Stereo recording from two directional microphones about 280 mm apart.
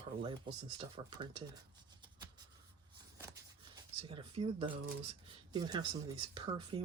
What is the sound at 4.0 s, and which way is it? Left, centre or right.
Speech, centre.